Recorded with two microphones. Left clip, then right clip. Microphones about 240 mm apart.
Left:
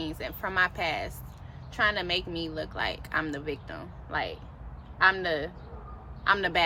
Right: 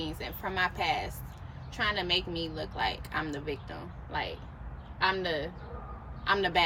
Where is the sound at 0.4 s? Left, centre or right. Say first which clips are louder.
Left 4 dB; left.